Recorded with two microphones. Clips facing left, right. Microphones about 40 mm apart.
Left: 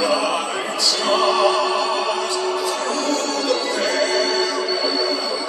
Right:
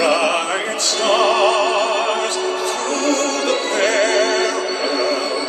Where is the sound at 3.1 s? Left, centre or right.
Right.